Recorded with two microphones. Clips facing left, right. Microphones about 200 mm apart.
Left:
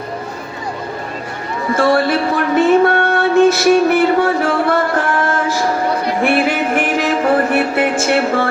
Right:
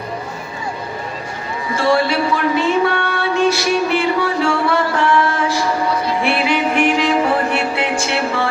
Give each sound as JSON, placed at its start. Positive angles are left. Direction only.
{"t": 1.7, "sound": "music", "side_deg": 50}